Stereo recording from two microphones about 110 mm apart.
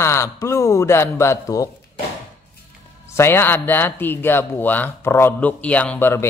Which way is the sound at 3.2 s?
20° left (ahead or behind).